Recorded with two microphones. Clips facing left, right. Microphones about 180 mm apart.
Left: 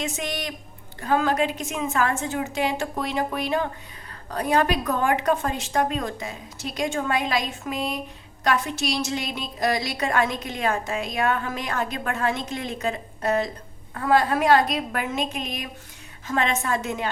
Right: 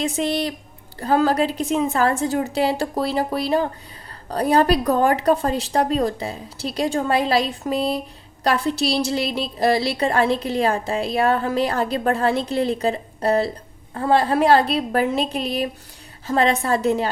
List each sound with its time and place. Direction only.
0.0 s a woman's voice: 35° right (ahead or behind)